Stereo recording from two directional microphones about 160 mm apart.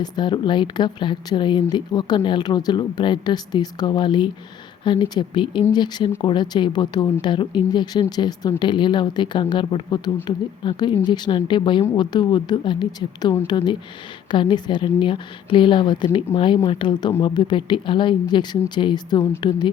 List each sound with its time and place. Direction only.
0.0 s a woman's voice: 30° left (ahead or behind)